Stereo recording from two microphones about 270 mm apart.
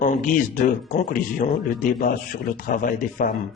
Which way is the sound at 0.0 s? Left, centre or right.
Left.